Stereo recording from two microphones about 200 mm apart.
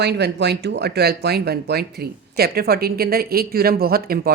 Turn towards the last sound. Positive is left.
turn(degrees=-50)  # may be behind; listen again after turning